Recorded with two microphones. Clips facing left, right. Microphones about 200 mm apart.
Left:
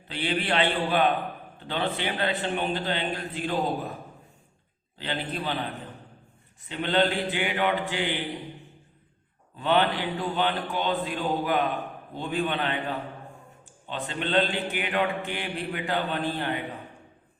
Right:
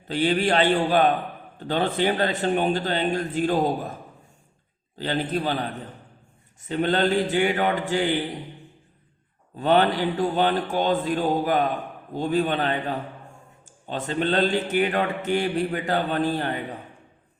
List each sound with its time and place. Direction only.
0.1 s a man's voice: 40° right (ahead or behind)
4.9 s a man's voice: 40° right (ahead or behind)
6.7 s a man's voice: 45° right (ahead or behind)
9.6 s a man's voice: 45° right (ahead or behind)